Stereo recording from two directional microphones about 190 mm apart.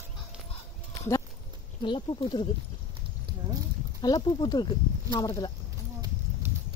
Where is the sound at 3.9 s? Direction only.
20° left (ahead or behind).